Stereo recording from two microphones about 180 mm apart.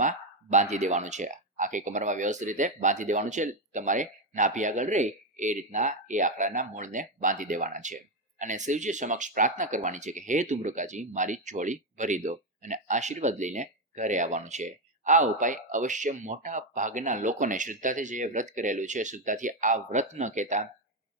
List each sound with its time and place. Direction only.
0.0 s speech: 45° right (ahead or behind)